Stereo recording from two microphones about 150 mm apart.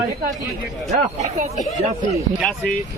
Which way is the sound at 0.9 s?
50° right (ahead or behind).